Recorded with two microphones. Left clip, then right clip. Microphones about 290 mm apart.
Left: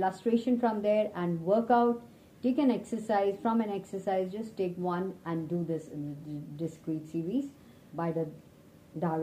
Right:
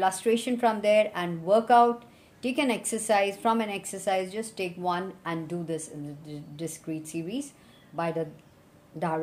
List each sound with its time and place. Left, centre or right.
0.0 s a woman's voice: right